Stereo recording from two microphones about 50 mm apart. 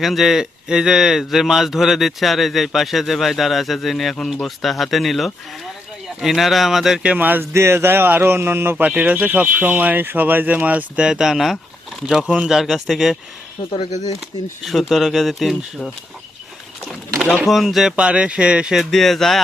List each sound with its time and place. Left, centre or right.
0.0 s speech: centre
4.1 s speech: centre
4.4 s speech: centre
7.2 s speech: right
7.5 s a man's voice: right
8.7 s speech: right
11.0 s speech: centre
14.2 s speech: centre
16.8 s speech: centre
17.9 s speech: right
18.7 s speech: centre